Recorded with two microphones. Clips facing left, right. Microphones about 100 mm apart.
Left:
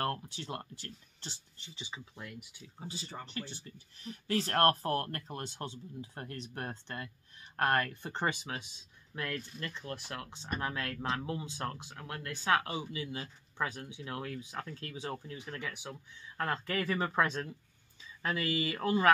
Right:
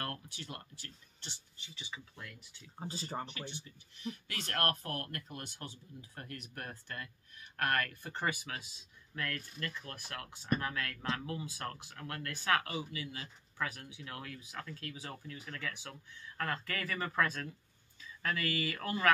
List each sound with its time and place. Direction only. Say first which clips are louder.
0.0 s speech: left 7 dB; 35° left (ahead or behind)
2.9 s speech: right 4 dB; 40° right (ahead or behind)
3.4 s speech: right 1 dB; 40° left (ahead or behind)